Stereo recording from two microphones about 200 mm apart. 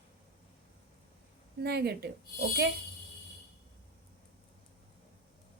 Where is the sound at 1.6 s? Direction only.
55° right (ahead or behind).